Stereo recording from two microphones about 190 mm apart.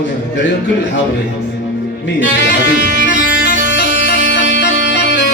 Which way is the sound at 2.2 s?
70° left (ahead or behind).